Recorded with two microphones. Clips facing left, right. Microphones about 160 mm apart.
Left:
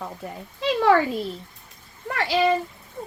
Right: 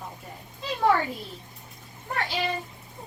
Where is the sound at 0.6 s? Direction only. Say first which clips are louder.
Left 4 dB; 90° left.